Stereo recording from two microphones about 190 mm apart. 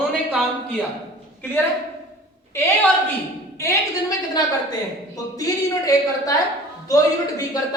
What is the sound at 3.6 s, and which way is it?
Speech, 15° left (ahead or behind).